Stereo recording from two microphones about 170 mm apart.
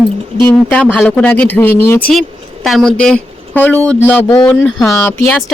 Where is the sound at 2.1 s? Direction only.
Centre (ahead or behind).